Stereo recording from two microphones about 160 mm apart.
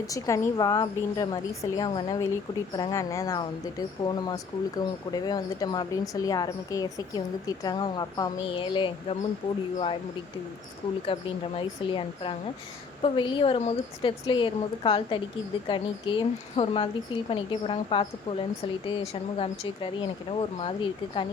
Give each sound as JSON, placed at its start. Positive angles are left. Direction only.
{"t": 0.1, "sound": "speech", "side_deg": 20}
{"t": 11.0, "sound": "speech", "side_deg": 35}